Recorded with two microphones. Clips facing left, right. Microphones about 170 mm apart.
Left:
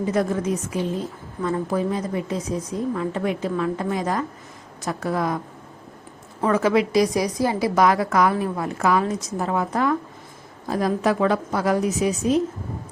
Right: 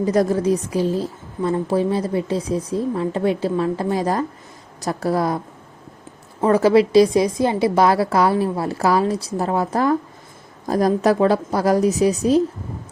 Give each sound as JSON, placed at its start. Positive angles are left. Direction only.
{"t": 0.0, "sound": "a woman's voice", "side_deg": -40}
{"t": 6.4, "sound": "a woman's voice", "side_deg": -35}